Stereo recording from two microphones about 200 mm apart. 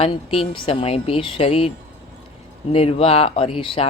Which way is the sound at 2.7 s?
30° left (ahead or behind).